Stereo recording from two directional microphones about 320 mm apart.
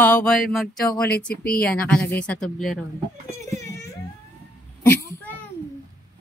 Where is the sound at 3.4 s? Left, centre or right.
Centre.